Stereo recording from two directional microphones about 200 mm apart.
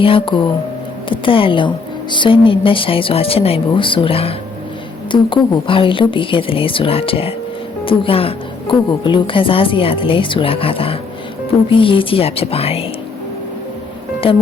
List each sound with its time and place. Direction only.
0.0 s a woman's voice: 25° left (ahead or behind)
14.2 s a woman's voice: 25° left (ahead or behind)